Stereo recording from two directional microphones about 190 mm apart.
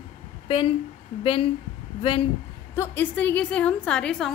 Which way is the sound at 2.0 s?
30° left (ahead or behind).